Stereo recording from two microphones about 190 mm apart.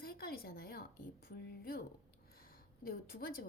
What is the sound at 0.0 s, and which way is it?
A woman's voice, 55° left (ahead or behind).